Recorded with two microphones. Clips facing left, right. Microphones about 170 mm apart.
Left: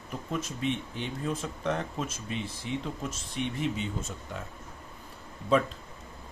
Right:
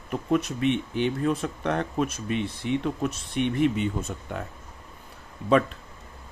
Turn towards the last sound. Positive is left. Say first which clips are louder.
# right 4 dB
turn(degrees=-65)  # may be behind; listen again after turning